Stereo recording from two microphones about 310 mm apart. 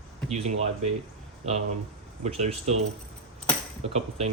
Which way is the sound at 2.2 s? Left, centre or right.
Right.